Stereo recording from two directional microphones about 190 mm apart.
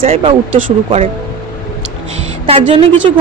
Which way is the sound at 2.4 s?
30° right (ahead or behind).